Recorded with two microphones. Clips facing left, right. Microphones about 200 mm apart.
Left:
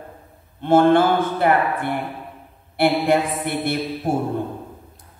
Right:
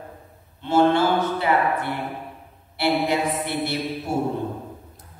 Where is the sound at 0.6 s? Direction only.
55° left (ahead or behind).